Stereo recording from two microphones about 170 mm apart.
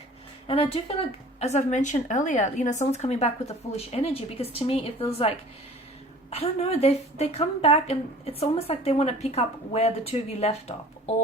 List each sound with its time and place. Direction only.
0.4 s a woman's voice: 35° left (ahead or behind)
6.3 s a woman's voice: 35° left (ahead or behind)